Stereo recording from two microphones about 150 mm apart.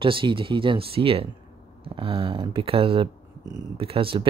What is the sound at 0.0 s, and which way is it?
Speech, 35° right (ahead or behind).